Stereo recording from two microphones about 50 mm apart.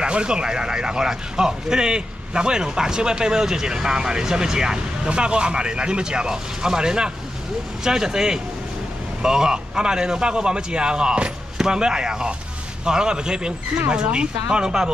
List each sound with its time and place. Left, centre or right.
0.0 s a man's voice: centre